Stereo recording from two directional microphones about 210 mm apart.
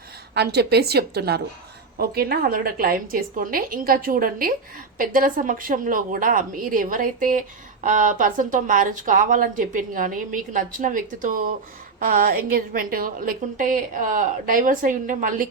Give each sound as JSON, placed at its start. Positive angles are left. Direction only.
{"t": 0.3, "sound": "a woman's voice", "side_deg": -50}